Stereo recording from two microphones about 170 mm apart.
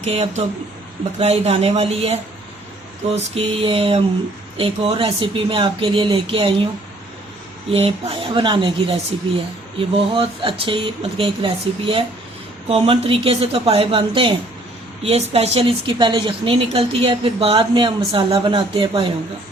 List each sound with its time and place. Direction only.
0.0 s a woman's voice: 35° right (ahead or behind)
3.2 s a woman's voice: 35° right (ahead or behind)
7.7 s a woman's voice: 35° right (ahead or behind)